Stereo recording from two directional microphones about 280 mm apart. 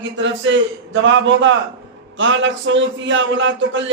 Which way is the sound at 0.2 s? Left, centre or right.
Right.